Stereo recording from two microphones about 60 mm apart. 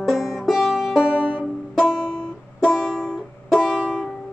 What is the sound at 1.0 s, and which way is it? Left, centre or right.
Music, right.